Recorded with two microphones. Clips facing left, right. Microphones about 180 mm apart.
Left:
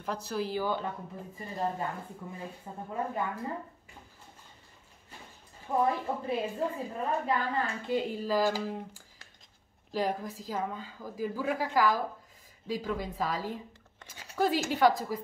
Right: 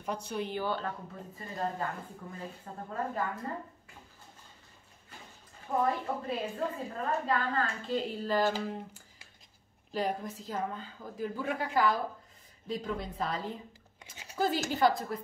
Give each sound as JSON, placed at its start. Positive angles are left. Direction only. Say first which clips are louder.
{"t": 0.0, "sound": "a woman's voice", "louder": "left 2 dB", "side_deg": 0}
{"t": 5.8, "sound": "speech", "louder": "left 2 dB", "side_deg": 15}
{"t": 9.9, "sound": "a woman's voice", "louder": "left 2 dB", "side_deg": 0}